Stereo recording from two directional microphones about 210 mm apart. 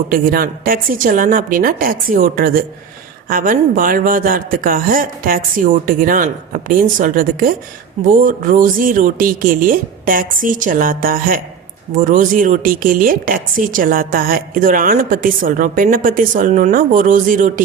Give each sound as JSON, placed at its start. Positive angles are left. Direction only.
{"t": 0.1, "sound": "a woman's voice", "side_deg": -45}